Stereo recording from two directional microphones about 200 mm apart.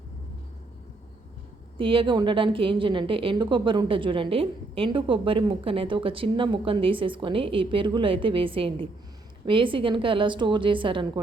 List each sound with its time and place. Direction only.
1.8 s a woman's voice: 25° right (ahead or behind)